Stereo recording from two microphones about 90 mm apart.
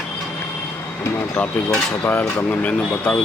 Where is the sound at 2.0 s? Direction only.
20° left (ahead or behind).